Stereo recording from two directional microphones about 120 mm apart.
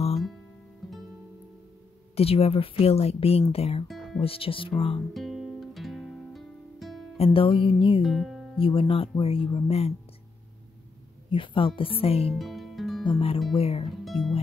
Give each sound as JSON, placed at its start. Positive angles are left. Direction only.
{"t": 0.1, "sound": "guitar", "side_deg": 0}
{"t": 2.1, "sound": "speech", "side_deg": 55}
{"t": 3.8, "sound": "music", "side_deg": 0}
{"t": 4.2, "sound": "speech", "side_deg": 50}
{"t": 5.1, "sound": "music", "side_deg": 0}
{"t": 7.2, "sound": "speech", "side_deg": 50}
{"t": 8.0, "sound": "music", "side_deg": 0}
{"t": 8.5, "sound": "speech", "side_deg": 50}
{"t": 11.2, "sound": "speech", "side_deg": 45}
{"t": 12.3, "sound": "music", "side_deg": 0}
{"t": 13.0, "sound": "speech", "side_deg": 45}
{"t": 14.0, "sound": "music", "side_deg": 0}